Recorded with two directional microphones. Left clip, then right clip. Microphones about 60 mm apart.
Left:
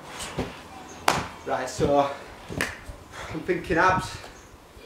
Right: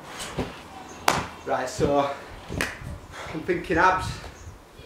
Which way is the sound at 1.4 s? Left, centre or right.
Centre.